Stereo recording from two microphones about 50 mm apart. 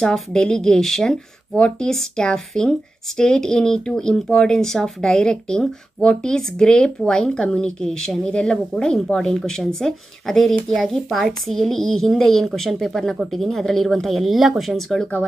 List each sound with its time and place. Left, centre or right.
0.0 s speech: centre
9.0 s speech: centre
14.8 s speech: centre